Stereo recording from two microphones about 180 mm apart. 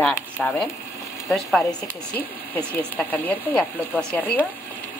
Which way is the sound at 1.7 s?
10° left (ahead or behind).